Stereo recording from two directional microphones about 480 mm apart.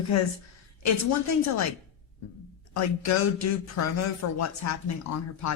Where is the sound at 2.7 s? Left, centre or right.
Left.